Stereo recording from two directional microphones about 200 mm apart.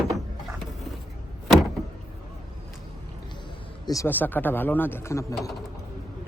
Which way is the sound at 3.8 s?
15° left (ahead or behind).